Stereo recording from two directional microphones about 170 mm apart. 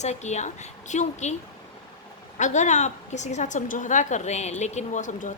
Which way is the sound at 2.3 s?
45° left (ahead or behind).